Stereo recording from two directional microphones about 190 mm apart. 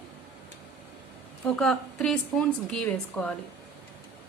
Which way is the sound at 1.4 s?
5° left (ahead or behind).